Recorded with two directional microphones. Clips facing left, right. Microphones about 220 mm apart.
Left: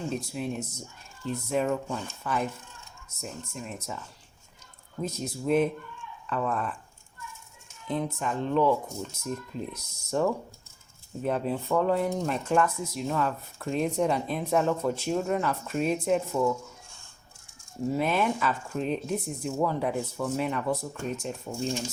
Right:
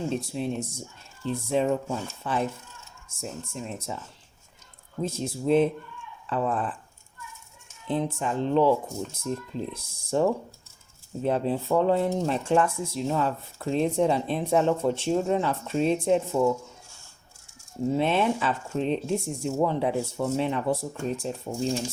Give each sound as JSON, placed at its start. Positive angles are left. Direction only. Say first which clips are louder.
{"t": 0.1, "sound": "speech", "louder": "right 3 dB", "side_deg": -30}
{"t": 5.0, "sound": "speech", "louder": "right 3 dB", "side_deg": -30}
{"t": 7.9, "sound": "speech", "louder": "right 3 dB", "side_deg": -30}
{"t": 17.9, "sound": "speech", "louder": "right 3 dB", "side_deg": -30}